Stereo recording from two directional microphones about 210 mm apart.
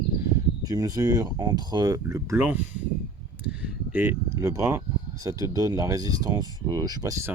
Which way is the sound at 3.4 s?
5° right (ahead or behind).